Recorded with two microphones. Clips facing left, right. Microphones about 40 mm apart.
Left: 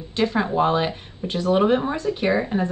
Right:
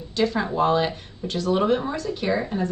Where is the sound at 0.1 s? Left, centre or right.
Left.